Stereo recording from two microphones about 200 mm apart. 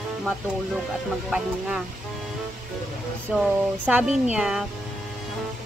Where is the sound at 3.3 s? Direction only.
5° right (ahead or behind).